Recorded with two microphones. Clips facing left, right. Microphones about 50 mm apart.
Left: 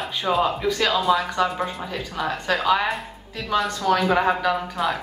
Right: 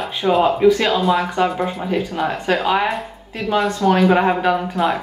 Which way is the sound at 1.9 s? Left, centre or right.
Right.